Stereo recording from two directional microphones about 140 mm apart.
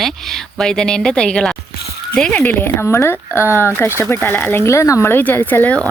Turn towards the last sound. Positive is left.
turn(degrees=10)  # may be behind; listen again after turning